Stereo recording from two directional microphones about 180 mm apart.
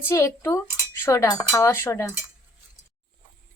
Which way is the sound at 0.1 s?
15° left (ahead or behind).